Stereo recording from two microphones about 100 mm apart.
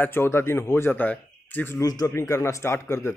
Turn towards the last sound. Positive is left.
turn(degrees=25)  # may be behind; listen again after turning